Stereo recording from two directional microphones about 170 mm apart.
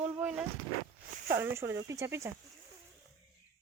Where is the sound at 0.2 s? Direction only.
5° right (ahead or behind).